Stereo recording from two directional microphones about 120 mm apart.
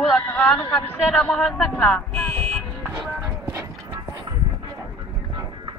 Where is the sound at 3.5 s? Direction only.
20° right (ahead or behind).